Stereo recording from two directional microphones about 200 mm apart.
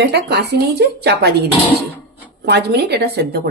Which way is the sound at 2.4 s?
55° right (ahead or behind).